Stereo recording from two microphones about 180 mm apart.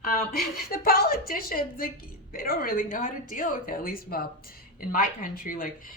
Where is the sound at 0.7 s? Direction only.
55° left (ahead or behind).